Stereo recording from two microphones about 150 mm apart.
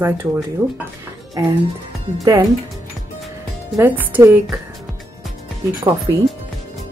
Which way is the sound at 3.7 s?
15° right (ahead or behind).